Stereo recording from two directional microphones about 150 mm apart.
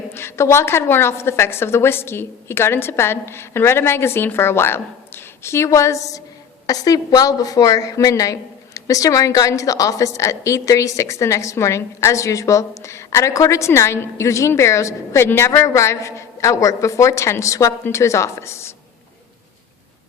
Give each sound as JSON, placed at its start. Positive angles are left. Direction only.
{"t": 0.1, "sound": "a woman's voice", "side_deg": 15}